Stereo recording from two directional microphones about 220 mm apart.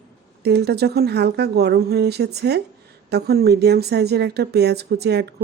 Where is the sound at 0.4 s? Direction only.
50° right (ahead or behind).